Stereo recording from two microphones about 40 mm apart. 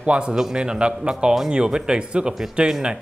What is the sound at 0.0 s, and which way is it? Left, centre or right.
Speech, right.